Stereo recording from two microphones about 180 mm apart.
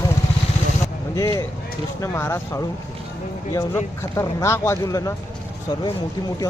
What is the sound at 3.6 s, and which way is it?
Speech, 15° left (ahead or behind).